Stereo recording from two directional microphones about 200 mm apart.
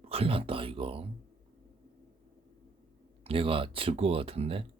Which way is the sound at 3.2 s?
25° right (ahead or behind).